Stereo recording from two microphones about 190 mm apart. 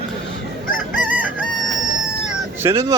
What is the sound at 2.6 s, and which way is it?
Speech, 15° right (ahead or behind).